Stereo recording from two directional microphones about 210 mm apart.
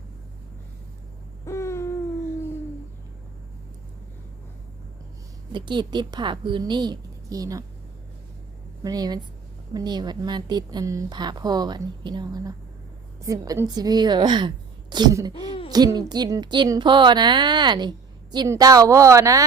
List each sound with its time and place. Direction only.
1.5 s hoot: 15° left (ahead or behind)
5.5 s a woman's voice: 20° right (ahead or behind)
8.8 s a woman's voice: 15° right (ahead or behind)